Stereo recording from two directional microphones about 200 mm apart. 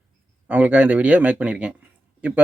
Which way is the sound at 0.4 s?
5° right (ahead or behind).